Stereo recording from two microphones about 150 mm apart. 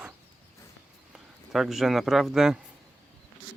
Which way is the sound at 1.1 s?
Centre (ahead or behind).